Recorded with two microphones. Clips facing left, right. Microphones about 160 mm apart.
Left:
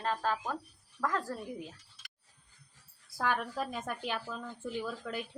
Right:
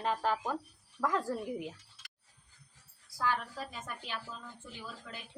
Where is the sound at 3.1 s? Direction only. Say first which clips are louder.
Left 2 dB; 55° left (ahead or behind).